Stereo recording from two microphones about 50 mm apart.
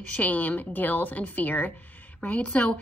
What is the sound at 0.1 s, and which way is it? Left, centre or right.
A woman's voice, left.